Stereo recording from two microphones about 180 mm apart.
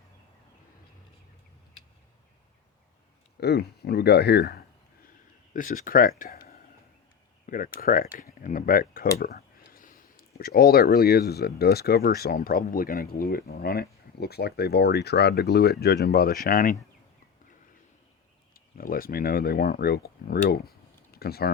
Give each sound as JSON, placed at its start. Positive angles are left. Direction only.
{"t": 3.4, "sound": "speech", "side_deg": 65}
{"t": 5.5, "sound": "speech", "side_deg": 50}
{"t": 18.5, "sound": "speech", "side_deg": 55}